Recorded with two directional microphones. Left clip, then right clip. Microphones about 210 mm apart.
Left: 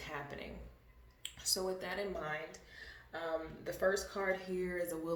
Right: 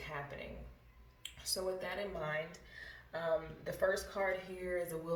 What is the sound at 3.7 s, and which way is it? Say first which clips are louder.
Speech: left 1 dB; 25° left (ahead or behind).